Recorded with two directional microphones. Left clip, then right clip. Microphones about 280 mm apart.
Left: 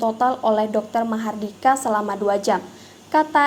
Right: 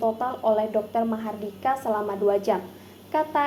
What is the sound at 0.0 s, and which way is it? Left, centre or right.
A woman's voice, left.